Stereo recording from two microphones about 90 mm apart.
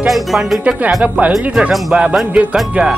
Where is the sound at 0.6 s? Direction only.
15° right (ahead or behind).